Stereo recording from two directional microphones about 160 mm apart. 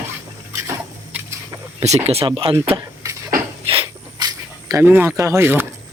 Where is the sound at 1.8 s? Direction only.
45° right (ahead or behind).